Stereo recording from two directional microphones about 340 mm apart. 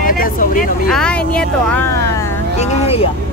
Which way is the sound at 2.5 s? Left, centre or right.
Centre.